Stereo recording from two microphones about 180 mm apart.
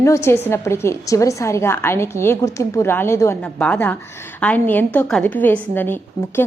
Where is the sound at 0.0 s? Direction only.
15° left (ahead or behind).